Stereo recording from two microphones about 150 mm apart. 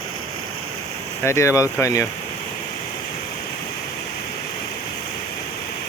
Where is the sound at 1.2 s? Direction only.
20° left (ahead or behind).